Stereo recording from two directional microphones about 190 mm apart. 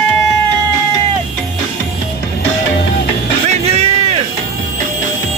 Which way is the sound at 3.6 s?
30° right (ahead or behind).